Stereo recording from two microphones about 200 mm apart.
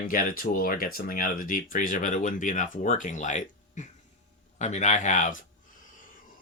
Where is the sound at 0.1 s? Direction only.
45° left (ahead or behind).